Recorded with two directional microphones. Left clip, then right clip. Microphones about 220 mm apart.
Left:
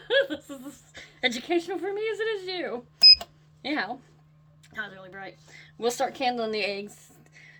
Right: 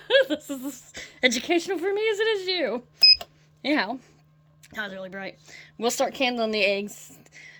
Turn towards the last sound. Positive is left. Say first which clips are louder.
# right 5 dB
turn(degrees=-45)  # may be behind; listen again after turning